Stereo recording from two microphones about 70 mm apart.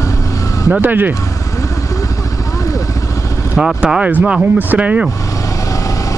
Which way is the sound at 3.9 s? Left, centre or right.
Centre.